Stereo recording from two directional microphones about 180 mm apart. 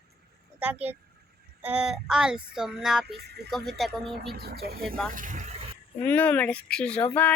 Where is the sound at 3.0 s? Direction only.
65° right (ahead or behind).